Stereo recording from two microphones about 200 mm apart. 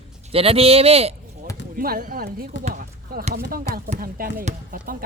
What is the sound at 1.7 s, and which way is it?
Speech, 45° right (ahead or behind).